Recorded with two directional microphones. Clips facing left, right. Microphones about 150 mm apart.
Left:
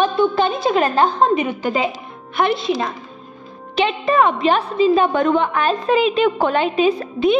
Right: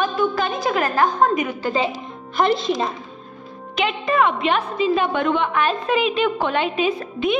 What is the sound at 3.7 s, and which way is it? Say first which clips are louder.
Music: left 4 dB; 30° left (ahead or behind).